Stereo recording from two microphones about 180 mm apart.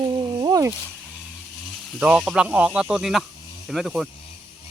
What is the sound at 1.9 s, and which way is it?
Speech, 5° right (ahead or behind).